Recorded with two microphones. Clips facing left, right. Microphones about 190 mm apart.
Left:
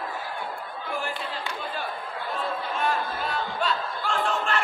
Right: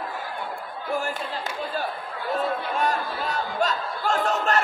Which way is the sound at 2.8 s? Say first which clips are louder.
Even; 45° right (ahead or behind).